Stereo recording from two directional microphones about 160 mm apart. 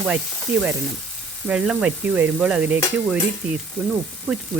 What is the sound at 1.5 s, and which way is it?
Stir, 5° right (ahead or behind).